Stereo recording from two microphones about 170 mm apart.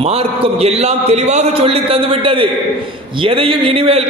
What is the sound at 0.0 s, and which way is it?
A man's voice, 35° right (ahead or behind).